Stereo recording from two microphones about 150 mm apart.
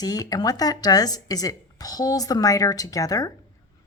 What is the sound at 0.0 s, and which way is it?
A woman's voice, 25° left (ahead or behind).